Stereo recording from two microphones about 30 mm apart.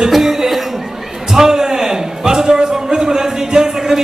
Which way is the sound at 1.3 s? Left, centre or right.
Centre.